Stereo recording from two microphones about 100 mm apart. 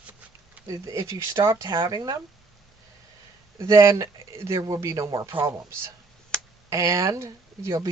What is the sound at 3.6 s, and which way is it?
Speech, 30° right (ahead or behind).